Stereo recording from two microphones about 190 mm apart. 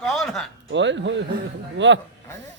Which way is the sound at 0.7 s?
70° right (ahead or behind).